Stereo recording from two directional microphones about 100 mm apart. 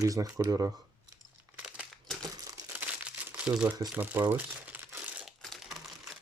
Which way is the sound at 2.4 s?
35° right (ahead or behind).